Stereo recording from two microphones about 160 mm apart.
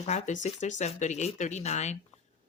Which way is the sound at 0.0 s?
45° left (ahead or behind).